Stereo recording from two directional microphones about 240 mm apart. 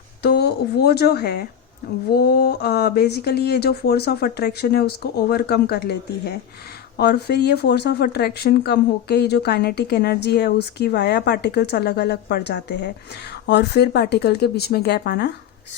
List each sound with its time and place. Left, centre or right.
0.2 s speech: left